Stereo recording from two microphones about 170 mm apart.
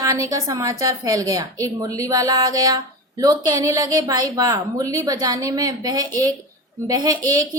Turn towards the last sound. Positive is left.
turn(degrees=-20)  # may be behind; listen again after turning